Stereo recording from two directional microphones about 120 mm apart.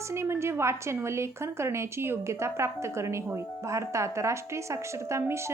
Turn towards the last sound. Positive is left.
turn(degrees=-25)  # may be behind; listen again after turning